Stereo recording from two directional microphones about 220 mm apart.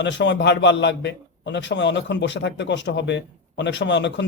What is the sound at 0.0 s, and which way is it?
A man's voice, 55° left (ahead or behind).